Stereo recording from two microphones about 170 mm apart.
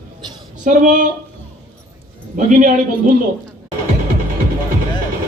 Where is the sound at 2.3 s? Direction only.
50° right (ahead or behind).